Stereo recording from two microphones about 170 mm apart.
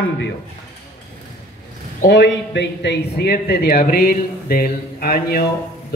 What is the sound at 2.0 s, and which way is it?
A man's voice, 85° left.